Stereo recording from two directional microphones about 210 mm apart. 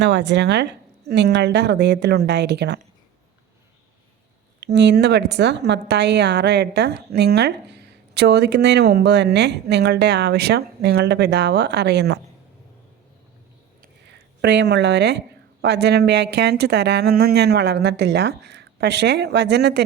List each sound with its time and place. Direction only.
0.0 s a woman's voice: 55° right (ahead or behind)
4.6 s a woman's voice: 55° right (ahead or behind)
13.8 s a sound: 55° right (ahead or behind)
15.6 s a woman's voice: 55° right (ahead or behind)